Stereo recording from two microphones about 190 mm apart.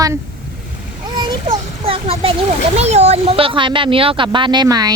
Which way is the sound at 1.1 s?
25° right (ahead or behind).